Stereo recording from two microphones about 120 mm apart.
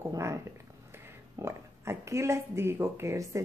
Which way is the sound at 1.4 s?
25° right (ahead or behind).